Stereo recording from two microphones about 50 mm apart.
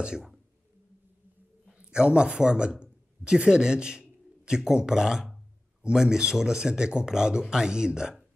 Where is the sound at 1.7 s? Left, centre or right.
Centre.